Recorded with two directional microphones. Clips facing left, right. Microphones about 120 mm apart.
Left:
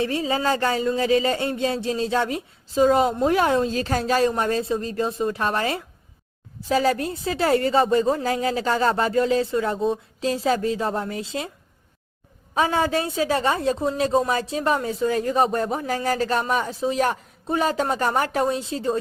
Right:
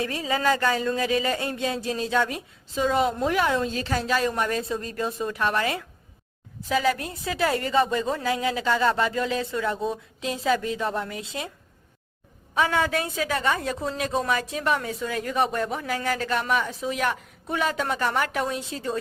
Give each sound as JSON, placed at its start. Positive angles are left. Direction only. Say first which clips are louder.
{"t": 0.0, "sound": "a woman's voice", "louder": "left 2 dB", "side_deg": 30}
{"t": 12.5, "sound": "a woman's voice", "louder": "left 2 dB", "side_deg": 30}